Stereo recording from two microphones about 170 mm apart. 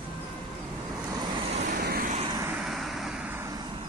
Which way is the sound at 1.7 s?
65° right (ahead or behind).